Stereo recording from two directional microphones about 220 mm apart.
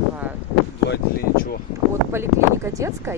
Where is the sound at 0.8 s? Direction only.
45° left (ahead or behind).